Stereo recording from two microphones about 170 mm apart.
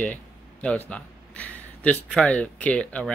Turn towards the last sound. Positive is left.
turn(degrees=5)  # may be behind; listen again after turning